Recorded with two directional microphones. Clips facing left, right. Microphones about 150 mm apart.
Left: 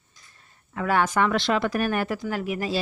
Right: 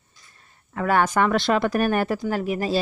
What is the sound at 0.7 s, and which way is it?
Speech, 45° right (ahead or behind).